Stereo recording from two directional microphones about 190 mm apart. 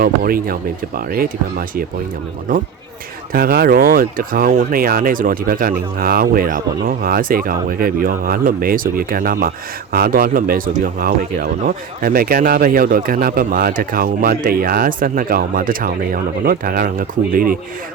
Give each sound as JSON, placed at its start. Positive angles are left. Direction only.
{"t": 0.0, "sound": "speech", "side_deg": -50}
{"t": 3.3, "sound": "speech", "side_deg": -55}